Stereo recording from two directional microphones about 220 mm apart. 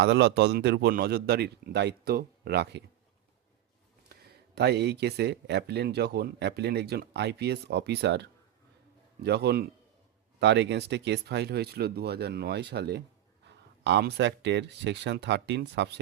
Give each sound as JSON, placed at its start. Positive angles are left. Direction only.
{"t": 0.0, "sound": "speech", "side_deg": -50}
{"t": 4.1, "sound": "speech", "side_deg": -50}